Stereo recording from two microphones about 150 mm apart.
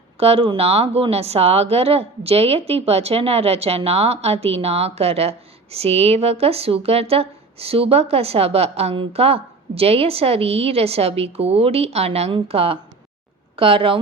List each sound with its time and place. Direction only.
0.2 s a woman's voice: 40° right (ahead or behind)